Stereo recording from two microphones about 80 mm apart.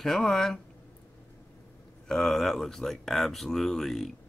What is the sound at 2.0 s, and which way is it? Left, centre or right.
Speech, centre.